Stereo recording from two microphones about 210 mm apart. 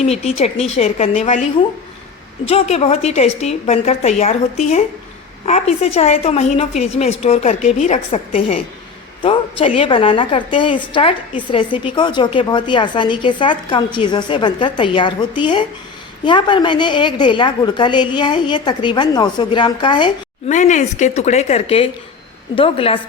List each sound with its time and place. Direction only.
0.0 s a woman's voice: 30° left (ahead or behind)
2.5 s a woman's voice: 30° left (ahead or behind)
5.5 s a woman's voice: 30° left (ahead or behind)
20.5 s a woman's voice: 35° left (ahead or behind)